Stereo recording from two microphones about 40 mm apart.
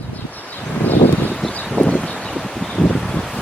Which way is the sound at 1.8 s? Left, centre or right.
Left.